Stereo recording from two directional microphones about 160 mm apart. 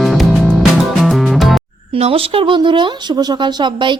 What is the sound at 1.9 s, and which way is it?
Speech, 40° right (ahead or behind).